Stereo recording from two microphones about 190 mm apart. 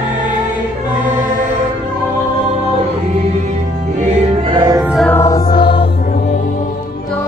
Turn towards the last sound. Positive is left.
turn(degrees=25)  # may be behind; listen again after turning